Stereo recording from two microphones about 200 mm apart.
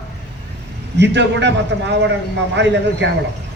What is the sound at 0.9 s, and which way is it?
A man's voice, 60° right (ahead or behind).